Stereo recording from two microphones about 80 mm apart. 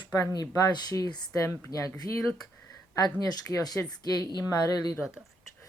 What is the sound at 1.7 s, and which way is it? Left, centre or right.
Speech, left.